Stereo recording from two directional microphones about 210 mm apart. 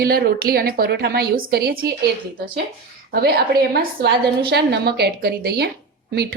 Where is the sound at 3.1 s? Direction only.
45° right (ahead or behind).